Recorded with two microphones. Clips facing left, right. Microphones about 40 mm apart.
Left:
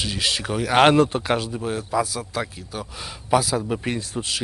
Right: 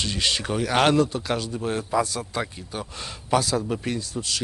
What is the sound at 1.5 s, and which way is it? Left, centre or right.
Speech, centre.